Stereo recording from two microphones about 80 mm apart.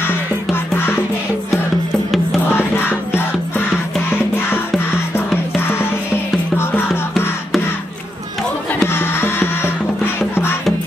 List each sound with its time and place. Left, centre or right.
0.0 s music: left
2.5 s music: left
8.8 s music: left